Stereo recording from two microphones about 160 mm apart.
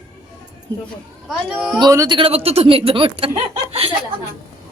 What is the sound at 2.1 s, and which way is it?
Female singing, 35° right (ahead or behind).